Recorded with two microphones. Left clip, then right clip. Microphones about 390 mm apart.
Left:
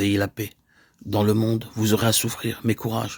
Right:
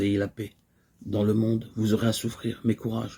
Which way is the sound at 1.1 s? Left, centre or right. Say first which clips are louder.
Left 4 dB; left.